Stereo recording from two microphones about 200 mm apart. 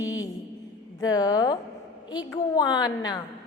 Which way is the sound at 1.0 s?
20° left (ahead or behind).